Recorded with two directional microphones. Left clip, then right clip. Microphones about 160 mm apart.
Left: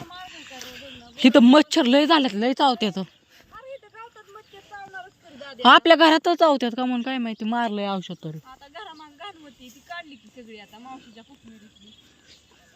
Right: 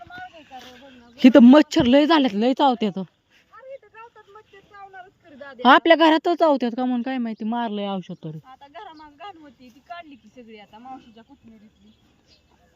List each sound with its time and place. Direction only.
0.3 s a sound: centre (ahead or behind)
0.9 s speech: 30° right (ahead or behind)
5.4 s a sound: centre (ahead or behind)
5.6 s a woman's voice: 20° right (ahead or behind)
8.4 s snake: centre (ahead or behind)
9.9 s speech: 5° right (ahead or behind)